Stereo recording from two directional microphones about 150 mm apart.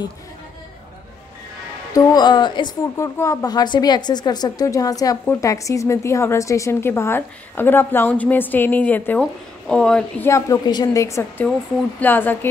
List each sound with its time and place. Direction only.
2.0 s a woman's voice: 25° left (ahead or behind)
3.0 s a woman's voice: 20° left (ahead or behind)
10.2 s a woman's voice: 20° left (ahead or behind)